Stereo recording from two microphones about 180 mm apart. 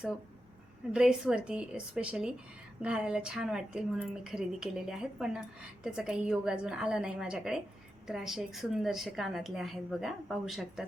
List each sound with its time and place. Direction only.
0.9 s a woman's voice: 5° right (ahead or behind)